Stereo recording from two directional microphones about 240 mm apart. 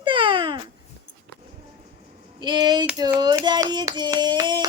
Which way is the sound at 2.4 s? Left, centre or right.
Centre.